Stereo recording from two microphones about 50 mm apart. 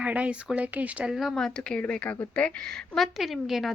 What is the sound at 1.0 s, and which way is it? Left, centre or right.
Speech, centre.